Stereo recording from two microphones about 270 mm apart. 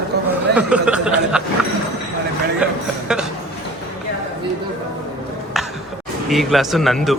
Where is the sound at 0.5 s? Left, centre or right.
Centre.